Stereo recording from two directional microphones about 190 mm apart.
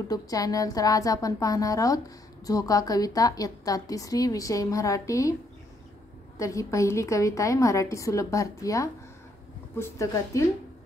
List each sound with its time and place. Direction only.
0.1 s a woman's voice: 20° left (ahead or behind)
6.3 s a woman's voice: 15° left (ahead or behind)